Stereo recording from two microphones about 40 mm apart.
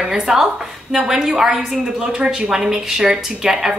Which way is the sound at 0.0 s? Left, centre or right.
Centre.